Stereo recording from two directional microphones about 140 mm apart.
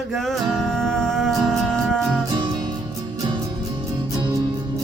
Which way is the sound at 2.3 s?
35° right (ahead or behind).